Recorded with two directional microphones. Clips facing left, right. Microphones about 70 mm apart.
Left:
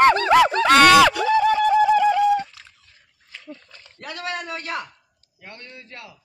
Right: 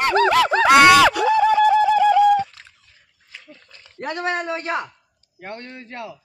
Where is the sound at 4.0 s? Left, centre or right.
Right.